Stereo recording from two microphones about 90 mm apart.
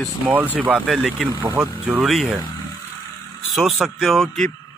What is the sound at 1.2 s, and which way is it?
Speech, 50° right (ahead or behind).